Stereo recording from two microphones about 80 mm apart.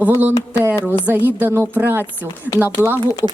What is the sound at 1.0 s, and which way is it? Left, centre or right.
A woman's voice, right.